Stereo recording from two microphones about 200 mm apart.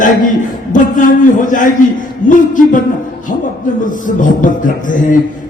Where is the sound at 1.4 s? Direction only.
40° left (ahead or behind).